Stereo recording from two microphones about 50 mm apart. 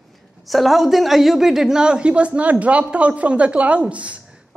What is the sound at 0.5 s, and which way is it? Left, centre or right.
A woman's voice, centre.